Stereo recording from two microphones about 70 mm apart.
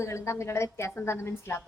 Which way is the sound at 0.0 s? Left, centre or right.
Left.